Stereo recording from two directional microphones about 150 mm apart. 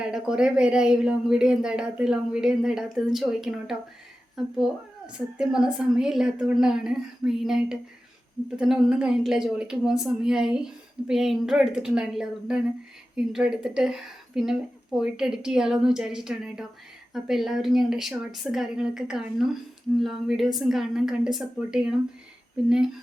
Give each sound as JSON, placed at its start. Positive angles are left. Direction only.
{"t": 0.0, "sound": "speech", "side_deg": -5}